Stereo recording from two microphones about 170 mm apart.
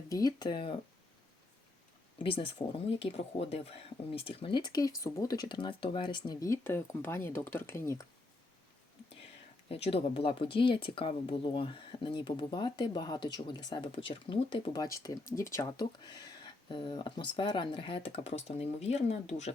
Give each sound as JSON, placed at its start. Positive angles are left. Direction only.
{"t": 0.1, "sound": "speech", "side_deg": 20}
{"t": 2.1, "sound": "speech", "side_deg": 30}
{"t": 9.6, "sound": "speech", "side_deg": 35}